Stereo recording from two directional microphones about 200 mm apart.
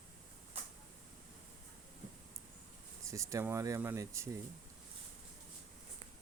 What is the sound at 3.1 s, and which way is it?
Speech, 15° right (ahead or behind).